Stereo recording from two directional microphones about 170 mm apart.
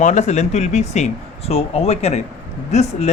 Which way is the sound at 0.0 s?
45° left (ahead or behind).